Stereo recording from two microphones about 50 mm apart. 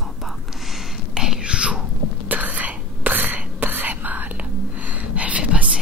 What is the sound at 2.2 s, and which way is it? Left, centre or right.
Whispering, right.